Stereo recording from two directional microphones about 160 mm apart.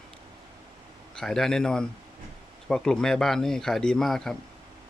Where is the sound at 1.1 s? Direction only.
5° left (ahead or behind).